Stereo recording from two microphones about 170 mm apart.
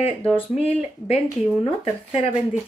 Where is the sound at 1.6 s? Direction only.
35° left (ahead or behind).